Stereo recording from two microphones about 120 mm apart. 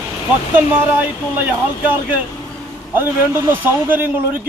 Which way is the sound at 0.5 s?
15° right (ahead or behind).